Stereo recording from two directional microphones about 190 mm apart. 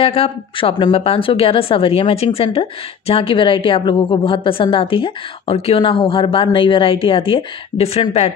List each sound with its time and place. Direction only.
0.0 s speech: 30° left (ahead or behind)